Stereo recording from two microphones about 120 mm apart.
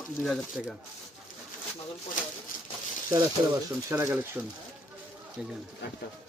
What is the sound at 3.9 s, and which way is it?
Speech, 20° right (ahead or behind).